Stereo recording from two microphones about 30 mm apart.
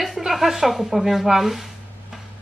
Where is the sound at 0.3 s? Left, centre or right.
Centre.